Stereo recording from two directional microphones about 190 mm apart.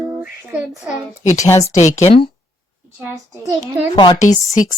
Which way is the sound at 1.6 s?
35° left (ahead or behind).